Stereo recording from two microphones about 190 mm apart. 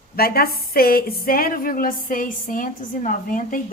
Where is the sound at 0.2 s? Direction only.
55° left (ahead or behind).